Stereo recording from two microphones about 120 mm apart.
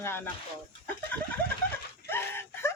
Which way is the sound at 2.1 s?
20° left (ahead or behind).